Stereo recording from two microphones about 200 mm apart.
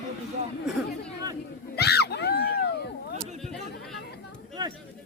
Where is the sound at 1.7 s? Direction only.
55° left (ahead or behind).